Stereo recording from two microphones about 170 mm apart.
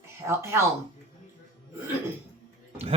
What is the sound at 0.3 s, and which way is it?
Speech, 15° right (ahead or behind).